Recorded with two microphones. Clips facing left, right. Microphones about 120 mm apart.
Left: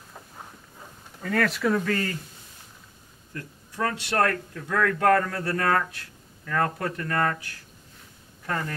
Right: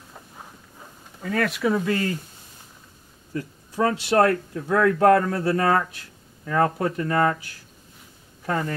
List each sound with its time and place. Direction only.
0.1 s a sound: centre (ahead or behind)
3.3 s speech: 15° right (ahead or behind)
8.5 s speech: 15° right (ahead or behind)